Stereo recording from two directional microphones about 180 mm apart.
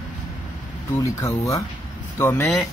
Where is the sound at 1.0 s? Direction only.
15° left (ahead or behind).